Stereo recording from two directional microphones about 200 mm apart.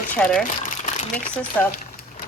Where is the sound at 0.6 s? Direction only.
35° left (ahead or behind).